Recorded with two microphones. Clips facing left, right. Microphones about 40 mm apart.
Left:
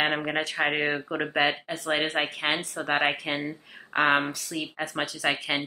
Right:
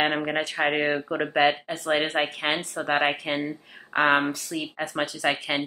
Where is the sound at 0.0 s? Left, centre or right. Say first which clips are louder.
Right 2 dB; centre.